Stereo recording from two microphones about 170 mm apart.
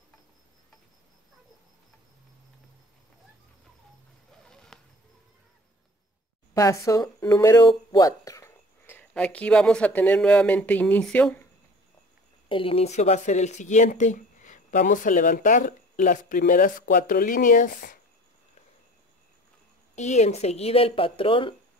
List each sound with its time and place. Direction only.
4.5 s a sound: 5° left (ahead or behind)
6.5 s speech: 20° left (ahead or behind)
12.4 s speech: 30° left (ahead or behind); by 17.9 s 55° left (ahead or behind)
20.0 s speech: 40° left (ahead or behind)